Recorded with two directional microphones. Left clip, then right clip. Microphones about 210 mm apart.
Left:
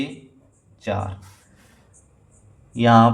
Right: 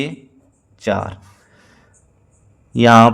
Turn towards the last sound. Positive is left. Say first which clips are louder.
# right 6 dB
turn(degrees=-45)  # may be behind; listen again after turning